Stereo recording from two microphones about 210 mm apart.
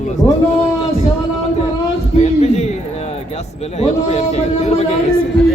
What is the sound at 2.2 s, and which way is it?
A man's voice, 30° left (ahead or behind).